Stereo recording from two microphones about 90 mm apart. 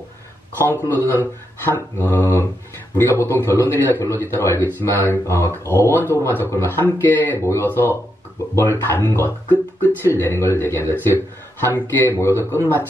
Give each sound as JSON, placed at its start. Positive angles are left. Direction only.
{"t": 0.6, "sound": "a man's voice", "side_deg": 25}